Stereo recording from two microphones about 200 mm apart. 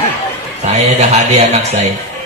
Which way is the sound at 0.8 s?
35° right (ahead or behind).